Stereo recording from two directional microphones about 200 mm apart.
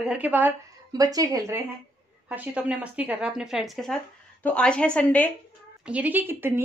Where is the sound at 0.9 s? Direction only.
20° right (ahead or behind); by 5.3 s 5° left (ahead or behind).